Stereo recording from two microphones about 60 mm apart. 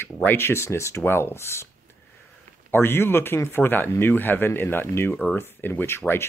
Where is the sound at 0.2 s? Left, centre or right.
Left.